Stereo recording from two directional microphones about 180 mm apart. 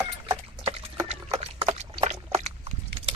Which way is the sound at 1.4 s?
35° right (ahead or behind).